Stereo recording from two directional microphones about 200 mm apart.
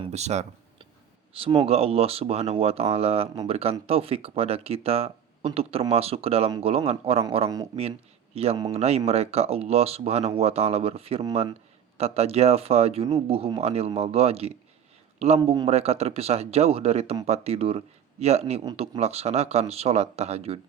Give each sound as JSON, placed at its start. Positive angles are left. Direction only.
{"t": 0.0, "sound": "a sound", "side_deg": -35}
{"t": 1.3, "sound": "speech", "side_deg": -30}
{"t": 15.5, "sound": "speech", "side_deg": -30}